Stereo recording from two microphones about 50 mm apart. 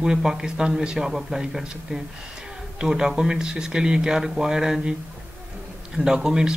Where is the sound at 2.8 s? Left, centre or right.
Centre.